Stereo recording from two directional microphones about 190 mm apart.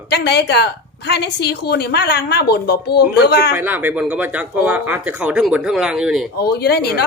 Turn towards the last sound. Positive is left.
turn(degrees=55)  # may be behind; listen again after turning